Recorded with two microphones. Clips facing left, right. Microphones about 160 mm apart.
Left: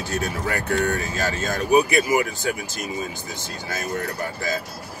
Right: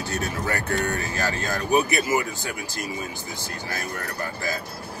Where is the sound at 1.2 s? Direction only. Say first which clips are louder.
Left 4 dB; 20° left (ahead or behind).